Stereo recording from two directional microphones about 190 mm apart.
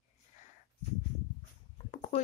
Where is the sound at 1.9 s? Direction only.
40° left (ahead or behind).